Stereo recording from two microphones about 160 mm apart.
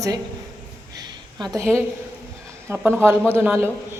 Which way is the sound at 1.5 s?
15° right (ahead or behind).